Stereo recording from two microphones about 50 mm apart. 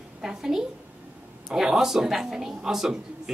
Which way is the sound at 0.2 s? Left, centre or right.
Centre.